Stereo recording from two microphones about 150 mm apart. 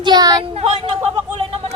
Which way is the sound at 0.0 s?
25° right (ahead or behind).